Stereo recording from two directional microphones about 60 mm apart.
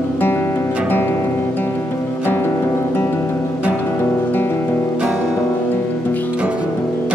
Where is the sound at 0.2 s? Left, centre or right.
Left.